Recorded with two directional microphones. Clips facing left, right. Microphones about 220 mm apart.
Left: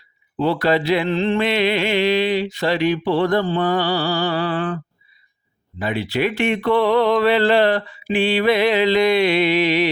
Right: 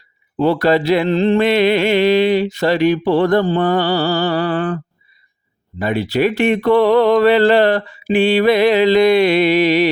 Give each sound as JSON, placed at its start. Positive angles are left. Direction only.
{"t": 0.3, "sound": "mantra", "side_deg": -45}
{"t": 5.8, "sound": "mantra", "side_deg": -45}